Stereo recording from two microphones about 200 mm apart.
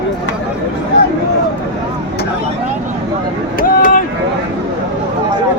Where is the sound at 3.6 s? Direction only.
45° left (ahead or behind).